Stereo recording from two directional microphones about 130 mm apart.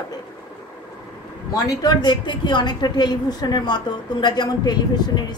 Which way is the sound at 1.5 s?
30° left (ahead or behind).